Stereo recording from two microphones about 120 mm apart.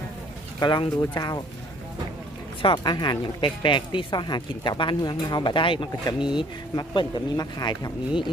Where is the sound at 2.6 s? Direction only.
45° left (ahead or behind).